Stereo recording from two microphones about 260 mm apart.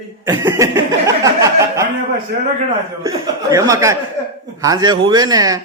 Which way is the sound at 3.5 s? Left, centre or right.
Centre.